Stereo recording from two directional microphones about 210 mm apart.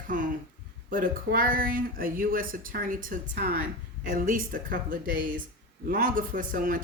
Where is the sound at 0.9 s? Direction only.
40° right (ahead or behind).